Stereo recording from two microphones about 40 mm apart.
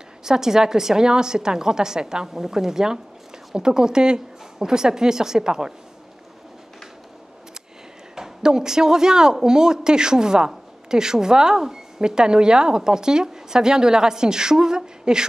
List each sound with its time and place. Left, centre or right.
0.2 s speech: centre
8.2 s speech: centre